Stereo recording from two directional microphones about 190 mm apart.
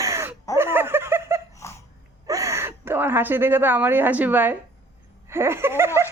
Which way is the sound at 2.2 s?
15° right (ahead or behind).